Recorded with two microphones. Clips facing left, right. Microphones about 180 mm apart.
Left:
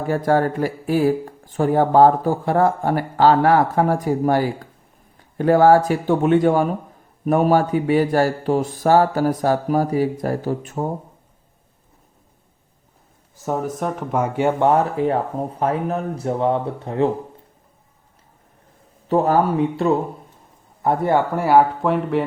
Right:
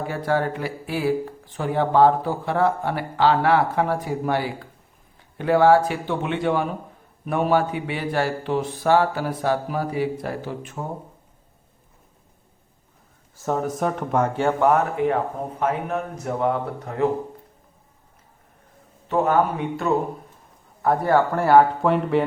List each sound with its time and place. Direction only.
0.1 s speech: 45° left (ahead or behind)
13.4 s a man's voice: 5° left (ahead or behind)
14.6 s speech: 30° left (ahead or behind)
19.0 s a man's voice: 35° left (ahead or behind); by 22.2 s centre (ahead or behind)